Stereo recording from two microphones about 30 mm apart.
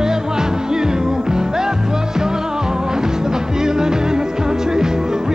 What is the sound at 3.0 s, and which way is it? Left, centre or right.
Music, right.